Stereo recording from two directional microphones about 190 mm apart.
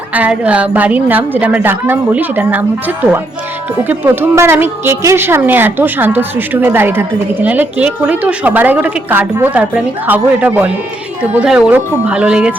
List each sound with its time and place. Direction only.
0.1 s a woman's voice: 5° right (ahead or behind)